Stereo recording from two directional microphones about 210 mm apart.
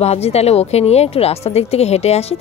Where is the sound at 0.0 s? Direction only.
30° left (ahead or behind).